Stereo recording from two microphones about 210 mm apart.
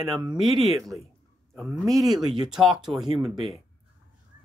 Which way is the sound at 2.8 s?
Centre (ahead or behind).